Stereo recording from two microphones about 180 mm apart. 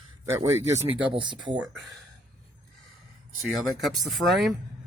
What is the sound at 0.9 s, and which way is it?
Speech, 25° right (ahead or behind).